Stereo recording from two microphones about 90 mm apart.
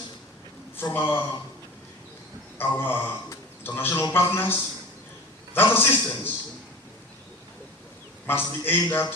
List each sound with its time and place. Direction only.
0.8 s a man's voice: 20° left (ahead or behind)
2.6 s a man's voice: 25° left (ahead or behind)
5.5 s a man's voice: 25° left (ahead or behind)
8.3 s a man's voice: 25° left (ahead or behind)